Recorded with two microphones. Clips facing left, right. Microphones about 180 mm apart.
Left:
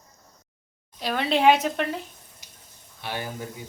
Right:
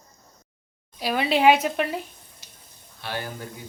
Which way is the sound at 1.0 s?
5° right (ahead or behind).